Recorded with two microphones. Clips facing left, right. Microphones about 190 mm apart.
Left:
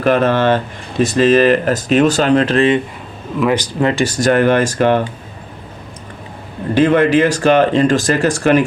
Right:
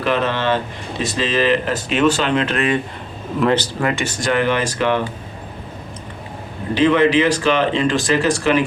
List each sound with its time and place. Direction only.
0.0 s speech: 50° left (ahead or behind)
3.5 s speech: 15° left (ahead or behind)
3.8 s speech: 35° left (ahead or behind)
6.7 s speech: 50° left (ahead or behind)